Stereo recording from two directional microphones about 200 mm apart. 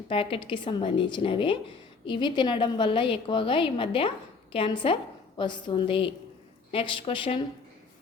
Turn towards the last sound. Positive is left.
turn(degrees=25)  # may be behind; listen again after turning